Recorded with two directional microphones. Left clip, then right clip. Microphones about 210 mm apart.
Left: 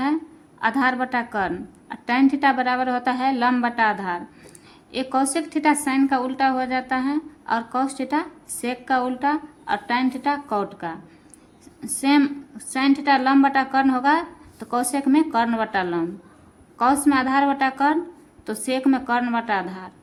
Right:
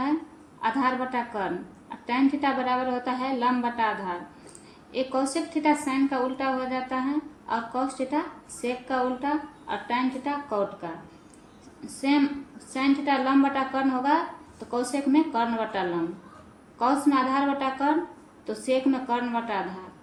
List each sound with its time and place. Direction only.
0.6 s a woman's voice: 35° left (ahead or behind)
12.7 s a woman's voice: 35° left (ahead or behind)
16.8 s a woman's voice: 35° left (ahead or behind)